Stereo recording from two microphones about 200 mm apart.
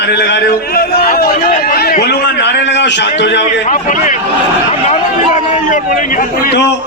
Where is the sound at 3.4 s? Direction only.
40° left (ahead or behind); by 6.7 s 60° left (ahead or behind).